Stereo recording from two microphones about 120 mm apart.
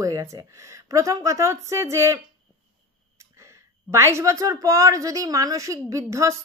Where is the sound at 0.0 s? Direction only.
25° right (ahead or behind).